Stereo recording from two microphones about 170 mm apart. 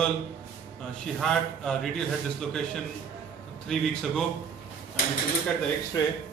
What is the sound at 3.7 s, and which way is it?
Speech, centre (ahead or behind).